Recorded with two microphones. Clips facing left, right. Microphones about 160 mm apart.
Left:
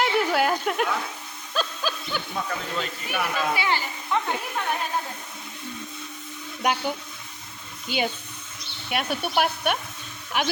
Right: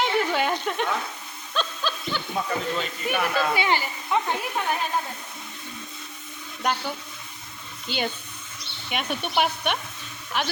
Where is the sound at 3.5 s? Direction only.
20° right (ahead or behind).